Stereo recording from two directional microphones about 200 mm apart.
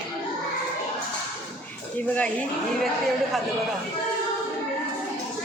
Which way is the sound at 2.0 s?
5° left (ahead or behind).